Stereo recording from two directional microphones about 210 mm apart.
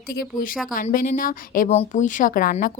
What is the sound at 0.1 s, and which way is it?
A woman's voice, 45° left (ahead or behind).